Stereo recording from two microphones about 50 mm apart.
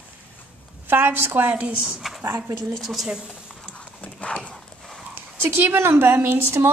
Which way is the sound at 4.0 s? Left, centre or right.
Left.